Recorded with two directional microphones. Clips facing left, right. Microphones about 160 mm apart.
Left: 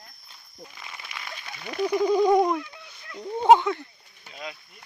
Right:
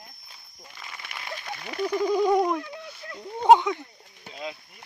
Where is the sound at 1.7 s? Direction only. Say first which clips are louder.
Left 2 dB; 10° left (ahead or behind).